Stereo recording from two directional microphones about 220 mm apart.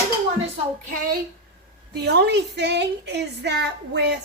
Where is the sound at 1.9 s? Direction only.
50° right (ahead or behind).